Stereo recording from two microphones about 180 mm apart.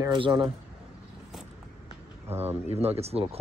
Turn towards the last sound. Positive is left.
turn(degrees=-35)  # may be behind; listen again after turning